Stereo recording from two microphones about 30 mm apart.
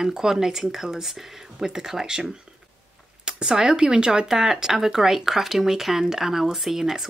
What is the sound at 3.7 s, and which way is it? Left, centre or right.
Speech, right.